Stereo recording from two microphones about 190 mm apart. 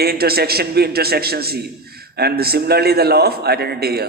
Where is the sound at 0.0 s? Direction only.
55° right (ahead or behind).